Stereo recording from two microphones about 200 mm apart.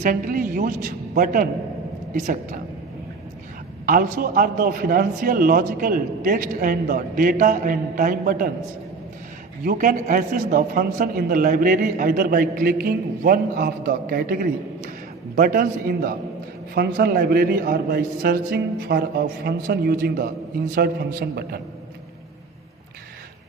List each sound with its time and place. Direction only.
0.0 s a man's voice: 40° right (ahead or behind)
3.8 s a man's voice: 45° right (ahead or behind)
9.6 s a man's voice: 45° right (ahead or behind)